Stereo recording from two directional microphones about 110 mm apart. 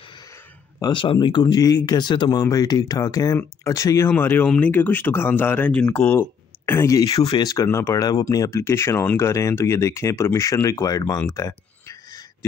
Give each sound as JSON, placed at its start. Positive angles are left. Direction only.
{"t": 1.2, "sound": "speech", "side_deg": 40}
{"t": 4.1, "sound": "speech", "side_deg": 15}